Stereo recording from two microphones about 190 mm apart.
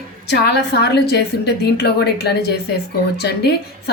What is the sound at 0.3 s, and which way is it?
A woman's voice, 60° left (ahead or behind).